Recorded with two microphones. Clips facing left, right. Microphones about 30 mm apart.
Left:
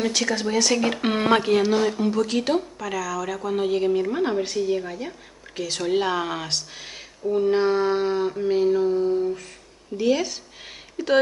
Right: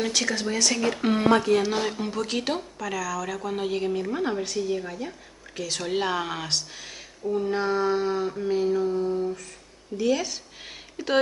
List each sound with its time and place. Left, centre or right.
0.0 s speech: centre
0.8 s speech: left
1.7 s speech: centre
6.8 s speech: centre
11.0 s speech: centre